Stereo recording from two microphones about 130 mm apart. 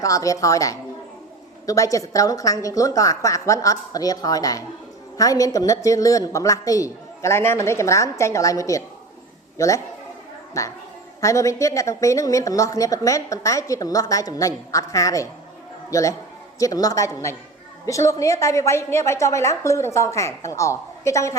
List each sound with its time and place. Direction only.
0.0 s a woman's voice: 25° left (ahead or behind)